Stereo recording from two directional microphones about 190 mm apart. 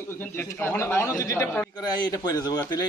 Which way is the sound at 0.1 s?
10° left (ahead or behind).